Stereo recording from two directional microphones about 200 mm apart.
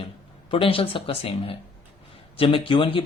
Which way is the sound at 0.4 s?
25° left (ahead or behind).